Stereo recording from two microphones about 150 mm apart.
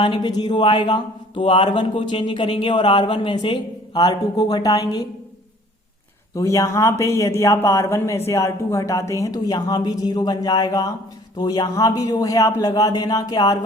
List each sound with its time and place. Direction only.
0.0 s speech: 30° left (ahead or behind)
6.3 s speech: 20° left (ahead or behind)